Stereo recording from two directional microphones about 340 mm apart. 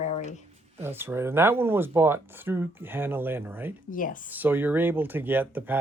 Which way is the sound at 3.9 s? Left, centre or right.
Left.